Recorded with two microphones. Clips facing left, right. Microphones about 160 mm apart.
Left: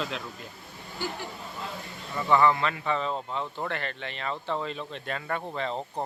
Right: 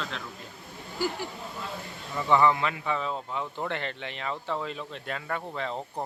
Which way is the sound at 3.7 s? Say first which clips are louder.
Even; 20° right (ahead or behind).